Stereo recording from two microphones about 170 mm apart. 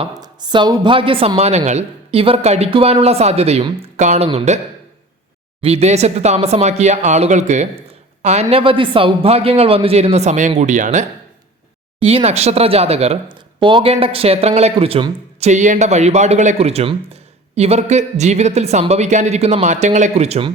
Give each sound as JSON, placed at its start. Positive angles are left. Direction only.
{"t": 0.0, "sound": "a woman's voice", "side_deg": -25}
{"t": 5.6, "sound": "a woman's voice", "side_deg": -40}
{"t": 11.9, "sound": "a woman's voice", "side_deg": -35}